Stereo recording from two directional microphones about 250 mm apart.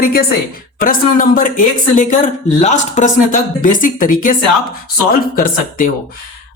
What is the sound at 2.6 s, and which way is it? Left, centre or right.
Speech, left.